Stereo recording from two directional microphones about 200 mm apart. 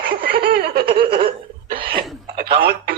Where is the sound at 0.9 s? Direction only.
25° right (ahead or behind).